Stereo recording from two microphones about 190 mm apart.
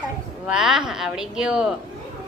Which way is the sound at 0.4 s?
5° right (ahead or behind).